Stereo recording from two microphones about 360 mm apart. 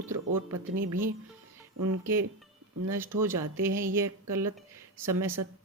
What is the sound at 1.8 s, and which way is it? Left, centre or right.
Speech, right.